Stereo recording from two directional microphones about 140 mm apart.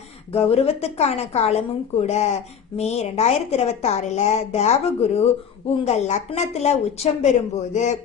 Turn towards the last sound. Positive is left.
turn(degrees=55)  # may be behind; listen again after turning